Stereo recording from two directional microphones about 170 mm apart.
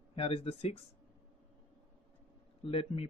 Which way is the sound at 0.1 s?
35° left (ahead or behind).